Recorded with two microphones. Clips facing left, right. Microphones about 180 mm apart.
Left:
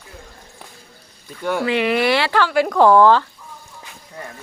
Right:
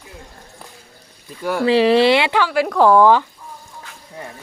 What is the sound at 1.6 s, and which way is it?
Speech, 35° right (ahead or behind).